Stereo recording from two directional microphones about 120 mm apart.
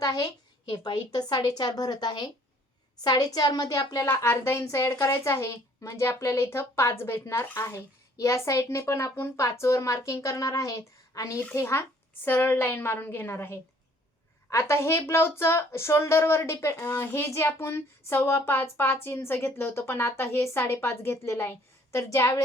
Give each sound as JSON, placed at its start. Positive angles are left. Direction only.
{"t": 0.0, "sound": "a woman's voice", "side_deg": 30}
{"t": 4.0, "sound": "a woman's voice", "side_deg": 20}